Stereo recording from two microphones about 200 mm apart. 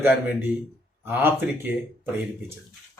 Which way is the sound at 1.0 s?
10° right (ahead or behind).